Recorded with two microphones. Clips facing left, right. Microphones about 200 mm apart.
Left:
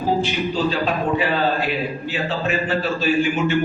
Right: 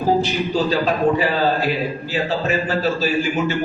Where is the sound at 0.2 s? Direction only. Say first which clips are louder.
Right 1 dB; 40° right (ahead or behind).